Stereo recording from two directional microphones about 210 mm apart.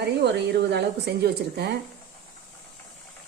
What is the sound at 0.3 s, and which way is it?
A woman's voice, 50° right (ahead or behind).